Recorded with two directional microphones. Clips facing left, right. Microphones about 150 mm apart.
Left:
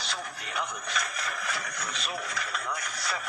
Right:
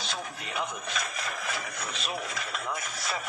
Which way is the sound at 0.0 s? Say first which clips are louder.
Right 1 dB; 25° right (ahead or behind).